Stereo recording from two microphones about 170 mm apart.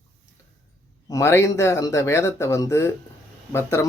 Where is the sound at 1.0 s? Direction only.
20° left (ahead or behind).